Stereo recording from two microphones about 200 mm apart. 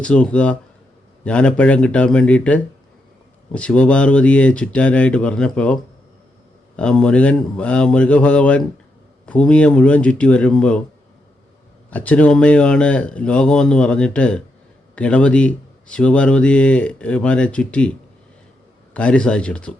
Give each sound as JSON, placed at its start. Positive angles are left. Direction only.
{"t": 0.0, "sound": "speech", "side_deg": 5}
{"t": 11.9, "sound": "speech", "side_deg": 5}
{"t": 18.9, "sound": "speech", "side_deg": 5}